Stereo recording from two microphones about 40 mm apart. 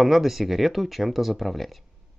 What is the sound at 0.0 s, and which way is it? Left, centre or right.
Speech, centre.